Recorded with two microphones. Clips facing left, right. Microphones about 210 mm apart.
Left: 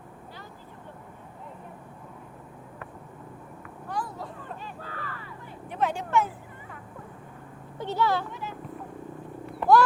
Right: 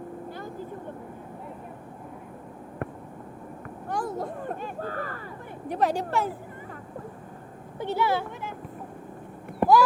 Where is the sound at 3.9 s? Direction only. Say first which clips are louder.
Right 5 dB; 45° right (ahead or behind).